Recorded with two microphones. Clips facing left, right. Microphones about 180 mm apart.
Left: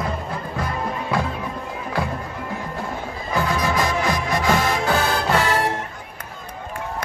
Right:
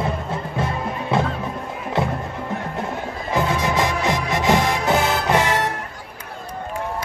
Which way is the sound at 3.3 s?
20° right (ahead or behind).